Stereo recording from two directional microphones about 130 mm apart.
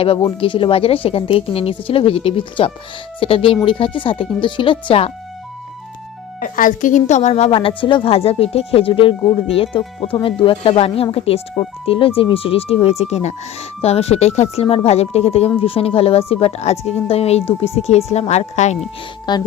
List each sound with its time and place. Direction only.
0.0 s speech: 45° left (ahead or behind)
6.4 s a woman's voice: 90° left; by 7.5 s 60° left (ahead or behind)
7.8 s speech: 40° left (ahead or behind); by 18.8 s 60° left (ahead or behind)
19.3 s speech: 35° left (ahead or behind)